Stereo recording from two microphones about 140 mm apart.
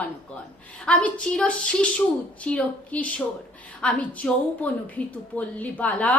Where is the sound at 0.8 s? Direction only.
10° left (ahead or behind).